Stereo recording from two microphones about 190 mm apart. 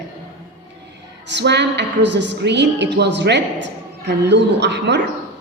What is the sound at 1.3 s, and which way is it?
A woman's voice, 65° right (ahead or behind).